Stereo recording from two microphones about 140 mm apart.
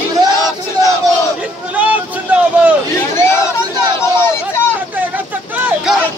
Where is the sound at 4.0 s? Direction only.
20° left (ahead or behind).